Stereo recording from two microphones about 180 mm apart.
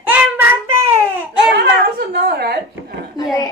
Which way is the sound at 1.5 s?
65° right (ahead or behind).